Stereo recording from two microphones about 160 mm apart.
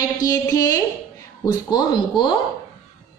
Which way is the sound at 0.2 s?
20° left (ahead or behind).